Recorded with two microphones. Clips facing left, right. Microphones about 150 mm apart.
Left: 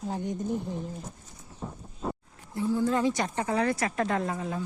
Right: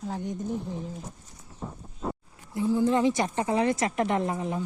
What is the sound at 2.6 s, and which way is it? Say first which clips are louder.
Speech: right 3 dB; 15° right (ahead or behind).